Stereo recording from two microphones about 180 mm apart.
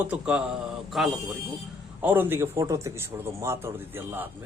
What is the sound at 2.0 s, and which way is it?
Speech, 10° right (ahead or behind).